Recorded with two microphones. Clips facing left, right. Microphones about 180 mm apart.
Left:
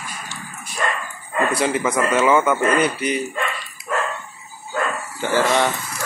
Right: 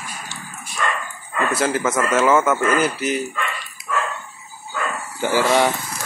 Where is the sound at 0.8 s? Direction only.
35° left (ahead or behind).